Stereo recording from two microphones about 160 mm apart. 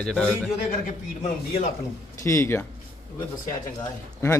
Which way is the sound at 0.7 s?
45° left (ahead or behind).